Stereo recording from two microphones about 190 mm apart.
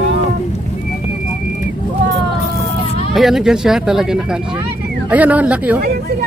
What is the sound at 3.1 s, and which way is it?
Speech, centre (ahead or behind).